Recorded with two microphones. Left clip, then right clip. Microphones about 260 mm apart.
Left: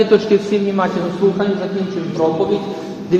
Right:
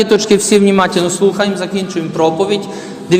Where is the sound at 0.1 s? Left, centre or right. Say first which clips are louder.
Right 3 dB; right.